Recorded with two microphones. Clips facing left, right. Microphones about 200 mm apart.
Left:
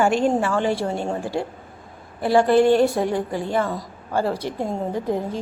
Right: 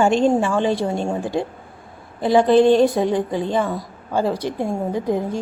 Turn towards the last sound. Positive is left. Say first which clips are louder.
# right 2 dB
turn(degrees=-15)  # may be behind; listen again after turning